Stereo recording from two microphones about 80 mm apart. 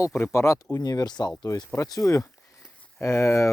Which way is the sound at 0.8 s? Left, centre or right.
Left.